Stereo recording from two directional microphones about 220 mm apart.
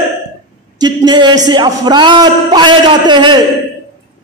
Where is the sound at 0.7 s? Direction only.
20° right (ahead or behind).